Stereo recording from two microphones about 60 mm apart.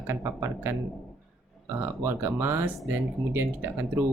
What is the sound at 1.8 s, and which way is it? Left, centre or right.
Speech, right.